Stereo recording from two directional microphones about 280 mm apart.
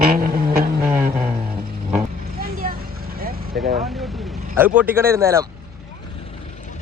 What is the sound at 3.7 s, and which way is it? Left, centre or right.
Vehicle, centre.